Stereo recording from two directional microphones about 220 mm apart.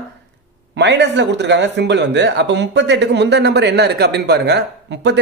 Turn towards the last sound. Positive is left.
turn(degrees=-50)  # may be behind; listen again after turning